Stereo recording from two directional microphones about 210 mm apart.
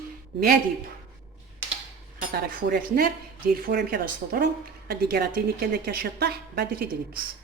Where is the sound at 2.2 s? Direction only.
45° right (ahead or behind).